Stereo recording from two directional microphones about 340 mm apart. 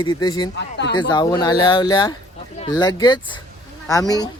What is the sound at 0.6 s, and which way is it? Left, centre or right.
Speech, left.